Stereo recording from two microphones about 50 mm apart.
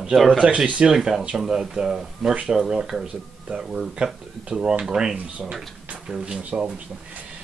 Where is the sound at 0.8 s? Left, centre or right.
Centre.